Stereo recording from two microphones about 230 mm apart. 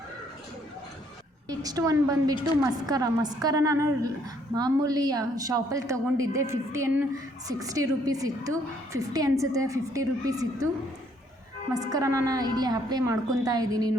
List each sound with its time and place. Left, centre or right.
1.5 s a woman's voice: centre
11.7 s a woman's voice: centre